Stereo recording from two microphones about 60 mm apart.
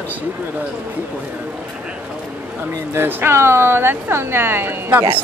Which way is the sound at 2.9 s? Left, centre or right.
Right.